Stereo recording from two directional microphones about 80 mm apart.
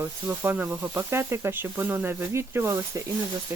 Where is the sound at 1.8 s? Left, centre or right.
Right.